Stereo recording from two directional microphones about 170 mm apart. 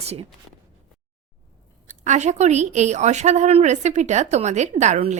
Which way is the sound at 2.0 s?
45° right (ahead or behind).